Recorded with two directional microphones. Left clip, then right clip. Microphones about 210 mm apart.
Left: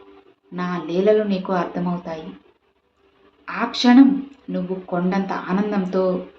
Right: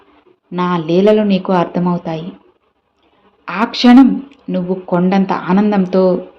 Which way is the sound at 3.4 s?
40° right (ahead or behind).